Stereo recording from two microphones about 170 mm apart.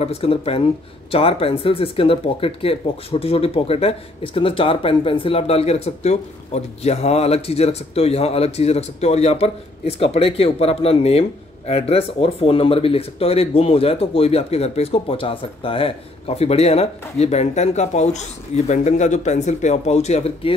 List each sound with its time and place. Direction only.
0.0 s speech: 35° left (ahead or behind)